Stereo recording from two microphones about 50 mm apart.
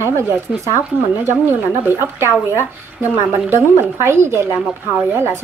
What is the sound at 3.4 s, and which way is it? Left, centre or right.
Speech, right.